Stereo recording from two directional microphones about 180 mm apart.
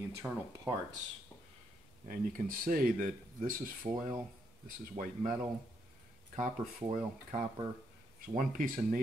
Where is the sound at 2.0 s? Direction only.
50° right (ahead or behind).